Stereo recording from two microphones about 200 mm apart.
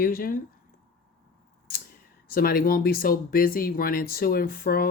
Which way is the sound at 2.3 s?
45° left (ahead or behind).